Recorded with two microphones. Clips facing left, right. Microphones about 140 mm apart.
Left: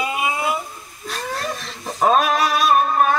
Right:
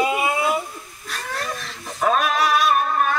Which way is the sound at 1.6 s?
25° left (ahead or behind).